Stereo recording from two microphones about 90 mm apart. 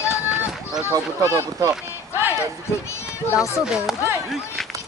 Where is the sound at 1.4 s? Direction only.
30° right (ahead or behind).